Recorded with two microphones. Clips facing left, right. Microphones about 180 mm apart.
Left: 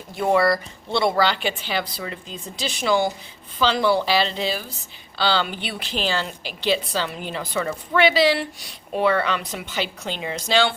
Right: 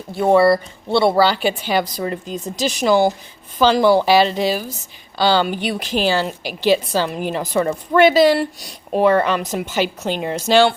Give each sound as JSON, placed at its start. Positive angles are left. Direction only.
{"t": 0.2, "sound": "a woman's voice", "side_deg": -30}